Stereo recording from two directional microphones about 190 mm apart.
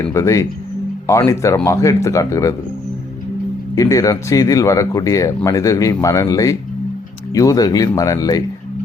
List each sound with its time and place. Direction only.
0.1 s speech: 15° left (ahead or behind)
3.8 s speech: 15° left (ahead or behind)